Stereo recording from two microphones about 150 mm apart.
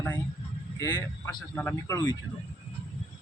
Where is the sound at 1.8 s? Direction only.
25° left (ahead or behind).